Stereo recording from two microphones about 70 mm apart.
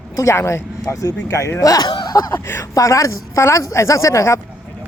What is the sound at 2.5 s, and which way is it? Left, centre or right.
Speech, left.